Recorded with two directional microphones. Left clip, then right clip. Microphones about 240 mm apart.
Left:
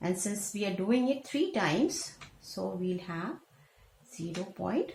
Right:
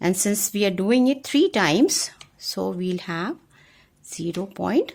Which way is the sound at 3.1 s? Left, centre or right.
Right.